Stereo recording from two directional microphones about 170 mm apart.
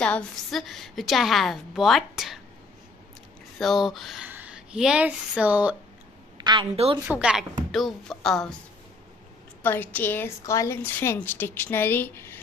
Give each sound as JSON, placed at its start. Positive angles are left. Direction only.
{"t": 0.0, "sound": "a woman's voice", "side_deg": 5}
{"t": 3.5, "sound": "speech", "side_deg": 0}
{"t": 6.3, "sound": "a woman's voice", "side_deg": -25}
{"t": 7.1, "sound": "a woman's voice", "side_deg": -5}
{"t": 9.6, "sound": "a woman's voice", "side_deg": 10}